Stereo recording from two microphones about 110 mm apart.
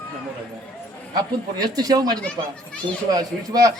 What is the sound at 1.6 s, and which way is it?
A man's voice, 35° right (ahead or behind).